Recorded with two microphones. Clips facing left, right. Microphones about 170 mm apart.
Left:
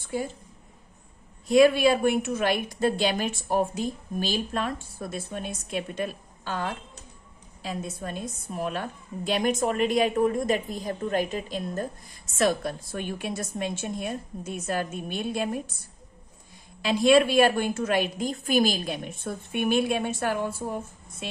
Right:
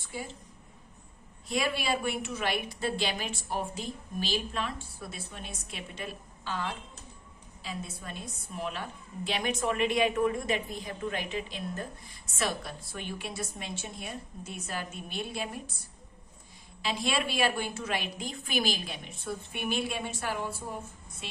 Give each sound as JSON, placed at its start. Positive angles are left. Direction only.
{"t": 1.5, "sound": "a woman's voice", "side_deg": 50}
{"t": 16.8, "sound": "a woman's voice", "side_deg": 50}